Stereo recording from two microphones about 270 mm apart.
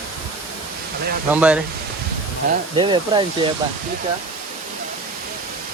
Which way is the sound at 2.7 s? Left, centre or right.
Centre.